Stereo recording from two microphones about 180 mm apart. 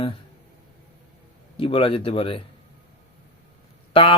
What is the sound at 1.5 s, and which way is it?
Speech, 30° left (ahead or behind).